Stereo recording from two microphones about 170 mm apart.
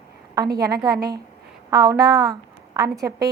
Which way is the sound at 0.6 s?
20° right (ahead or behind).